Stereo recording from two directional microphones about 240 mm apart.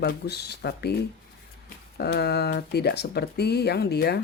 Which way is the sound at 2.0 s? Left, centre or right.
Left.